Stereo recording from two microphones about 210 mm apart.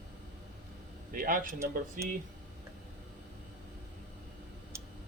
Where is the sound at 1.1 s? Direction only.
40° right (ahead or behind).